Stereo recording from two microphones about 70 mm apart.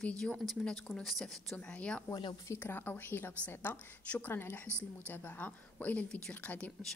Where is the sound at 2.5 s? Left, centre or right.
Left.